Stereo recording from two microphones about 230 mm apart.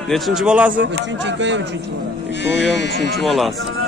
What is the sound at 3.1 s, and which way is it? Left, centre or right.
Speech, centre.